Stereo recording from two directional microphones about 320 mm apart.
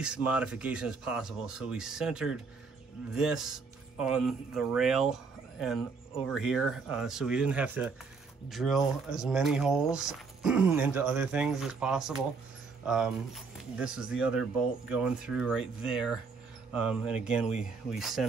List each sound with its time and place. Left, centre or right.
0.0 s speech: centre
17.5 s speech: left
17.8 s speech: centre